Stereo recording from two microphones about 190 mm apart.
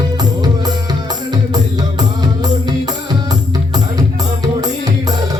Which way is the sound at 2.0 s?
20° right (ahead or behind).